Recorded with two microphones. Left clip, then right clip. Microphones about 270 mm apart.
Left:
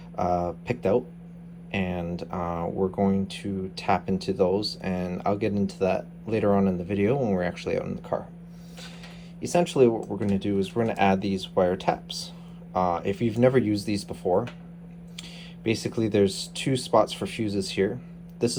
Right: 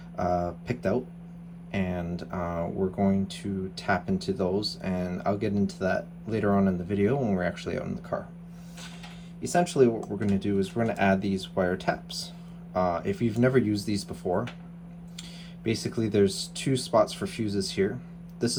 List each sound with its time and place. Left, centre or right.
0.2 s speech: centre
9.5 s speech: centre
15.6 s speech: centre